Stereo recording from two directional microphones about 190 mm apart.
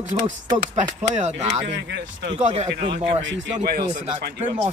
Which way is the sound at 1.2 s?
35° right (ahead or behind).